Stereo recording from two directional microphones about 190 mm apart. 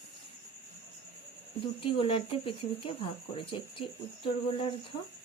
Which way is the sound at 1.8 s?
30° left (ahead or behind).